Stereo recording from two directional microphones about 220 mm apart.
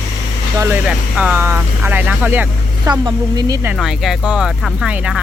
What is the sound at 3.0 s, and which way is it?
Speech, 20° right (ahead or behind).